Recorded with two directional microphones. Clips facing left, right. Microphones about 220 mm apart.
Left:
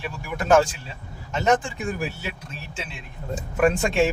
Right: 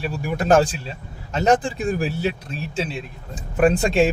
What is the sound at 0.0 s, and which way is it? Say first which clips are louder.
Speech: right 6 dB; 35° right (ahead or behind).